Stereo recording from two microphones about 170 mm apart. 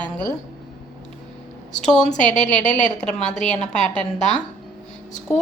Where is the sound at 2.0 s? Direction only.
45° left (ahead or behind).